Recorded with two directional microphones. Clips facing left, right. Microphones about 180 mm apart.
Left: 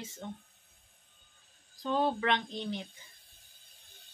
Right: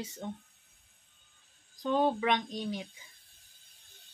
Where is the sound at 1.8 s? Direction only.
15° right (ahead or behind).